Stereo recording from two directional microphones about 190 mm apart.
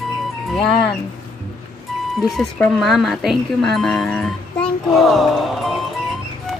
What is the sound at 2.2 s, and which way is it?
Speech, centre (ahead or behind).